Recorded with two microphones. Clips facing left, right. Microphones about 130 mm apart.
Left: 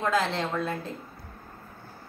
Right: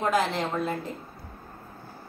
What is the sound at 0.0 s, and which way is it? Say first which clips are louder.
Speech: right 1 dB; 15° right (ahead or behind).